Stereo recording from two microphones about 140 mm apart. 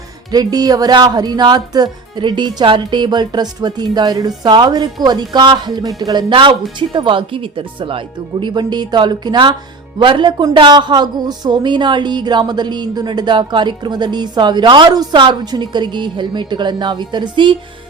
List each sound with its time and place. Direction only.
0.3 s a woman's voice: 30° right (ahead or behind)